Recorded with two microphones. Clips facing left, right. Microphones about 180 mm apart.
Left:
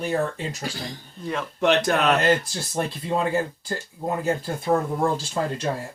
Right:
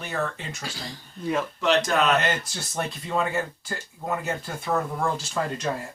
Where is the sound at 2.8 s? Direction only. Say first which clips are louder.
Left 2 dB; 30° left (ahead or behind).